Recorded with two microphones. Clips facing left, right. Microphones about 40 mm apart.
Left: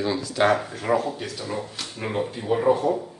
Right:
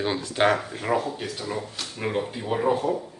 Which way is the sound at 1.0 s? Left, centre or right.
Right.